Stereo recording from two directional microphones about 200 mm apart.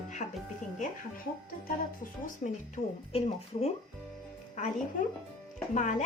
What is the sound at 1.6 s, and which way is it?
Speech, 45° left (ahead or behind).